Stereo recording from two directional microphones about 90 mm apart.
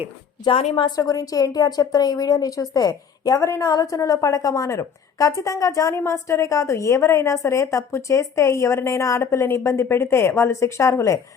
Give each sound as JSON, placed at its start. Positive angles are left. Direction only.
{"t": 0.4, "sound": "a woman's voice", "side_deg": 70}
{"t": 0.9, "sound": "a woman's voice", "side_deg": 40}